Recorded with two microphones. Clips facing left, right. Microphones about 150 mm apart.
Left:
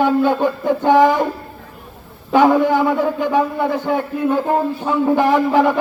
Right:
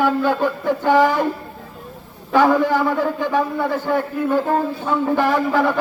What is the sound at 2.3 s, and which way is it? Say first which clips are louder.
A man's voice: left 2 dB; 20° left (ahead or behind).